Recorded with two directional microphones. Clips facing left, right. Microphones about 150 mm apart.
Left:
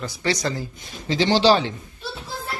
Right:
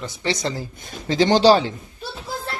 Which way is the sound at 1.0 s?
45° right (ahead or behind).